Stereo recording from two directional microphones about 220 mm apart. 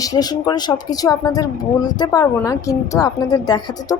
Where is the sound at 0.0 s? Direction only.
15° left (ahead or behind).